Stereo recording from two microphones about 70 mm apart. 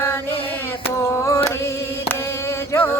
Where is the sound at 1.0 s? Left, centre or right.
Left.